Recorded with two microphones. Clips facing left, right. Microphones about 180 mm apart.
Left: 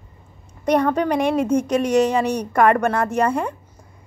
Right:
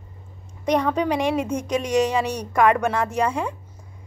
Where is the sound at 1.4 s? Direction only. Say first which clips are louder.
Left 6 dB; 55° left (ahead or behind).